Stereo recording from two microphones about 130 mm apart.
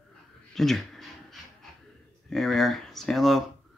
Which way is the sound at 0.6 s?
Centre (ahead or behind).